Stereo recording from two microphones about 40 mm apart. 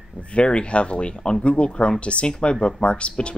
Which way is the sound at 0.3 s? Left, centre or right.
Left.